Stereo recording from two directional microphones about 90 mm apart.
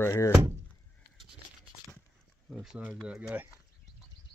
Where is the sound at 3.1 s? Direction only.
15° right (ahead or behind).